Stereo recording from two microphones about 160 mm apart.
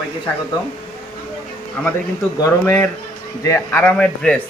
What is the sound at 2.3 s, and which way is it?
Speech, 15° left (ahead or behind).